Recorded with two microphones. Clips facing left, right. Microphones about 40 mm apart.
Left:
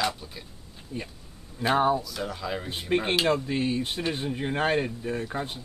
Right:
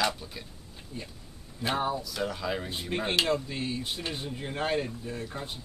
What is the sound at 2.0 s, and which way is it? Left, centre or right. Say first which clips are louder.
Speech: right 1 dB; centre.